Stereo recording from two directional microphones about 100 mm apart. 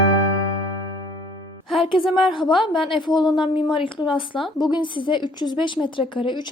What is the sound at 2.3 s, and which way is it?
A woman's voice, 55° left (ahead or behind).